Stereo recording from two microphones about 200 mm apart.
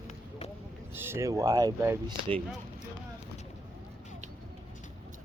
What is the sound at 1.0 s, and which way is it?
Speech, 10° right (ahead or behind).